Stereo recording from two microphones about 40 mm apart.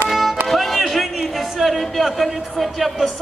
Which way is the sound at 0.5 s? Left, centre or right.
Centre.